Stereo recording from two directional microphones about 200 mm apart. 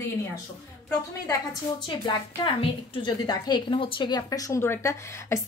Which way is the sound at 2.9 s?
20° left (ahead or behind).